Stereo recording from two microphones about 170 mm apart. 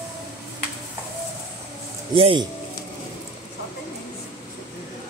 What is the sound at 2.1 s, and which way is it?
Speech, 30° right (ahead or behind).